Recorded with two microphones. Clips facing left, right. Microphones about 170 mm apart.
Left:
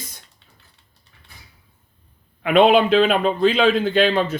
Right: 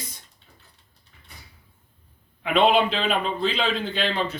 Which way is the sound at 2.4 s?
55° left (ahead or behind).